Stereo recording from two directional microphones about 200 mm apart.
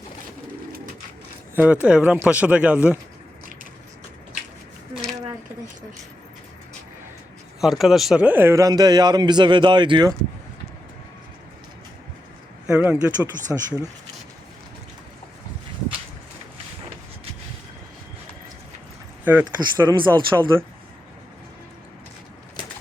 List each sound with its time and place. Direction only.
1.5 s speech: 10° right (ahead or behind)
7.6 s speech: centre (ahead or behind); by 10.2 s 20° right (ahead or behind)
12.6 s speech: 10° right (ahead or behind)
19.2 s speech: 10° right (ahead or behind)